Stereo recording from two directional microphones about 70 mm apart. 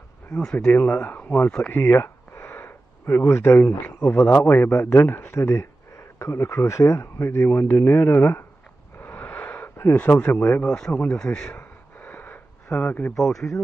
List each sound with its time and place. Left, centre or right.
0.4 s speech: centre
0.7 s speech: left
1.7 s a sound: left
4.3 s speech: left
9.0 s a sound: left
9.9 s speech: left
10.6 s speech: centre
10.9 s speech: left
11.1 s speech: centre
11.5 s a sound: left
13.1 s speech: centre